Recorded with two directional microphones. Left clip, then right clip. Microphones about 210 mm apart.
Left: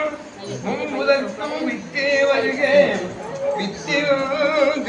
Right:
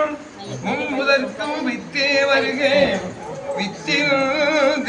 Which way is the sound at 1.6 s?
15° right (ahead or behind).